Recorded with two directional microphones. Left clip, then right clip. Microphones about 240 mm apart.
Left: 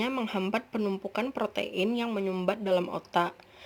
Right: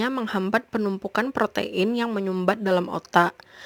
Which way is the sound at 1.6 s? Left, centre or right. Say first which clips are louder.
Right 5 dB; right.